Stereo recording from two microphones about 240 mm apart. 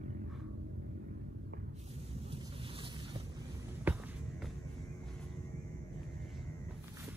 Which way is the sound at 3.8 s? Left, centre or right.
Centre.